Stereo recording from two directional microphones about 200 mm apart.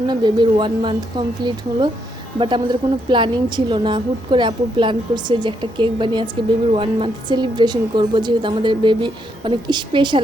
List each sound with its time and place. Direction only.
0.1 s speech: 20° right (ahead or behind)